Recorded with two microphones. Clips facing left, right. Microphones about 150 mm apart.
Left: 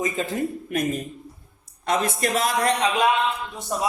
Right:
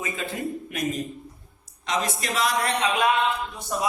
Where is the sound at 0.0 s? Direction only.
40° left (ahead or behind).